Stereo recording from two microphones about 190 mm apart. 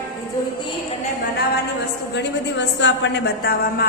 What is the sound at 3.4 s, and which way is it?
Speech, 50° left (ahead or behind).